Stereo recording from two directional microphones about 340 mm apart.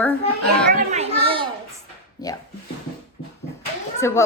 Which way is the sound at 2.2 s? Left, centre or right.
Centre.